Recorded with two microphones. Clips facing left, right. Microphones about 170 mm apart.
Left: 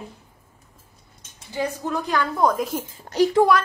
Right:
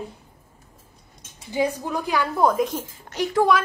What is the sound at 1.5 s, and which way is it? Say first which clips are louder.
A woman's voice: right 2 dB; 15° right (ahead or behind).